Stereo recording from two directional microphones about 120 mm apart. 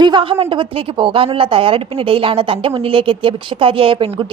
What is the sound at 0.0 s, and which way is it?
A woman's voice, 45° right (ahead or behind).